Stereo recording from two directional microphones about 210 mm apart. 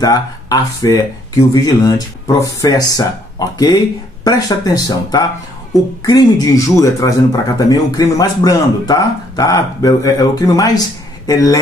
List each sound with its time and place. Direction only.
0.0 s speech: 15° left (ahead or behind)